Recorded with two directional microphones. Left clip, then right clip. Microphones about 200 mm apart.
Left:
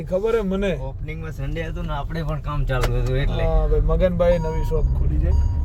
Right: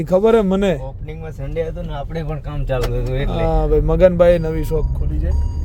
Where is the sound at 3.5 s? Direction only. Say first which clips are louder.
Right 8 dB; 55° right (ahead or behind).